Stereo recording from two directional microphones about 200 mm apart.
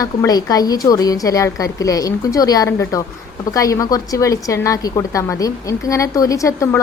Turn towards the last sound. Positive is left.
turn(degrees=15)  # may be behind; listen again after turning